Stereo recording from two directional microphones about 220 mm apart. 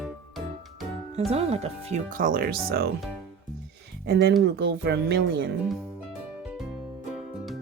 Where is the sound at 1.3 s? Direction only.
30° right (ahead or behind); by 2.9 s 45° right (ahead or behind).